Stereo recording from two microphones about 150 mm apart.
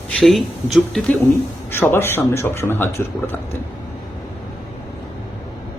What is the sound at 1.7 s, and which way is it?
Speech, 15° left (ahead or behind).